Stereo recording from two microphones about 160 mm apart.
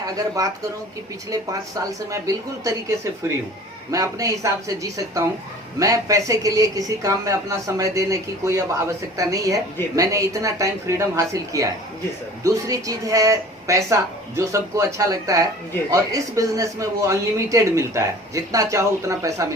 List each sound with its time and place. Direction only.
0.4 s speech: 20° right (ahead or behind)
1.9 s speech: 20° right (ahead or behind)